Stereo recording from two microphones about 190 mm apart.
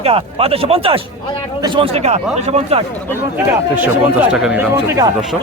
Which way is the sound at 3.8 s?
10° right (ahead or behind).